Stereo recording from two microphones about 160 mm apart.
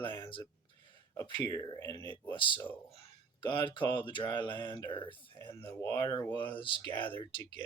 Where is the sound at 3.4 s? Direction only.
30° left (ahead or behind).